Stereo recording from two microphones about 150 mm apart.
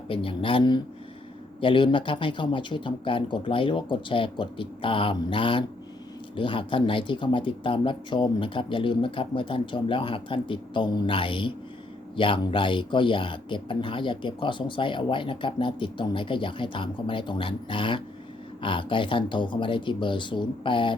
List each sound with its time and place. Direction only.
0.1 s speech: 35° left (ahead or behind)